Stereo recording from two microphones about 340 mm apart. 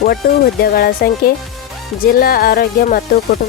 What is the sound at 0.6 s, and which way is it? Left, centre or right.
Music, left.